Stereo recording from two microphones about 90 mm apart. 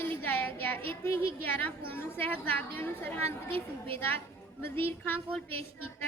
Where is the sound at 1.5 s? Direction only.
20° left (ahead or behind).